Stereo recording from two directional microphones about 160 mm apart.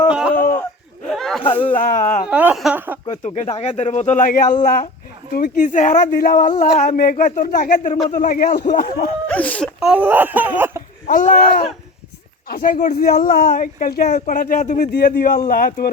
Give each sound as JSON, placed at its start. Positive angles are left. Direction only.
{"t": 0.1, "sound": "a sound", "side_deg": -5}
{"t": 1.5, "sound": "speech", "side_deg": 35}
{"t": 1.7, "sound": "speech", "side_deg": 55}
{"t": 2.3, "sound": "a sound", "side_deg": -5}
{"t": 3.1, "sound": "speech", "side_deg": 45}
{"t": 9.2, "sound": "speech", "side_deg": 10}
{"t": 9.8, "sound": "a sound", "side_deg": -10}
{"t": 11.0, "sound": "speech", "side_deg": 50}
{"t": 12.5, "sound": "speech", "side_deg": 65}
{"t": 12.9, "sound": "speech", "side_deg": 70}
{"t": 14.9, "sound": "speech", "side_deg": 65}